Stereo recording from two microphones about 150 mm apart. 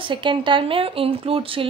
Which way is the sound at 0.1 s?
30° right (ahead or behind).